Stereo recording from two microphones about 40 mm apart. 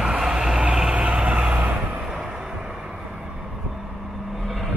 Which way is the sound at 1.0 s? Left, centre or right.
Right.